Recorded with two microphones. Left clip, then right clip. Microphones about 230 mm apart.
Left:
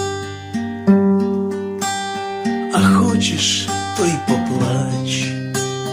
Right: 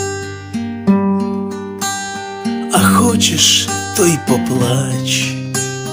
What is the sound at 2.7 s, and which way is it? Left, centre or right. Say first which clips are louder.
Music: right 5 dB; right.